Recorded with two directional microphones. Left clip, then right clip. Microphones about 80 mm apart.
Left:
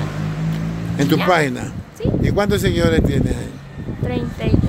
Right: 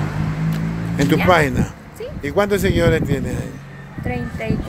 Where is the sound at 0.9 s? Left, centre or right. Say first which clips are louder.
Right 1 dB; left.